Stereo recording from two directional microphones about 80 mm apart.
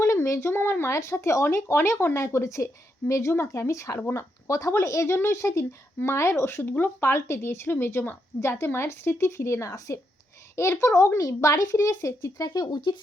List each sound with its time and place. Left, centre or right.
0.0 s speech: left